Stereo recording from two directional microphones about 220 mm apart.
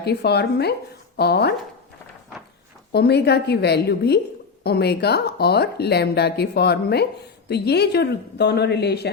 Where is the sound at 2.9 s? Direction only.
50° left (ahead or behind).